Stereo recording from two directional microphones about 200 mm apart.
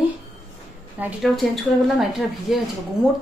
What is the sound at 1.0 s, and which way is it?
Speech, centre (ahead or behind).